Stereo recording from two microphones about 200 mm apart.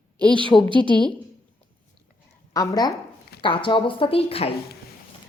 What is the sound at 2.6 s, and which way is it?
A woman's voice, 20° left (ahead or behind).